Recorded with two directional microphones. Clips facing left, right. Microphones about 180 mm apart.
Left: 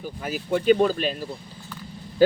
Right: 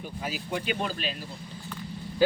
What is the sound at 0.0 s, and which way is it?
Speech, 50° left (ahead or behind).